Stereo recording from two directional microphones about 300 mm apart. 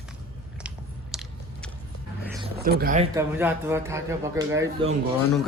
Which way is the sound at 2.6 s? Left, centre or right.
Right.